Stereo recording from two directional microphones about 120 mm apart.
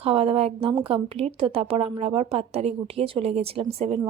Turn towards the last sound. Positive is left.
turn(degrees=-60)  # may be behind; listen again after turning